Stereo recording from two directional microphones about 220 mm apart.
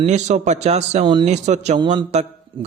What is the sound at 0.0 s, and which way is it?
A man's voice, 35° right (ahead or behind).